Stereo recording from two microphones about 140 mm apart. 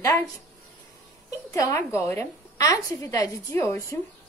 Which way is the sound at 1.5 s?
20° left (ahead or behind).